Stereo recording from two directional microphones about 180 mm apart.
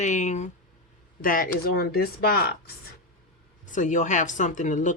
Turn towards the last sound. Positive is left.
turn(degrees=45)  # may be behind; listen again after turning